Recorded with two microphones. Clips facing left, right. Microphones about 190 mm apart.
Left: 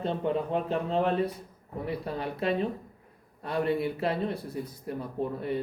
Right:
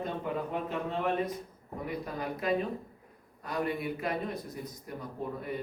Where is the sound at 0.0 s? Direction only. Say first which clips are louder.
Left 5 dB; 30° left (ahead or behind).